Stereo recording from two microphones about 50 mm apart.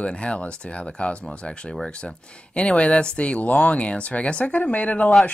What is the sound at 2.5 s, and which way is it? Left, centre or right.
Speech, left.